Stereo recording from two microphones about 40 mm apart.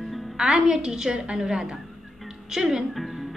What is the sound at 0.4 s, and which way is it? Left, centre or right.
A woman's voice, right.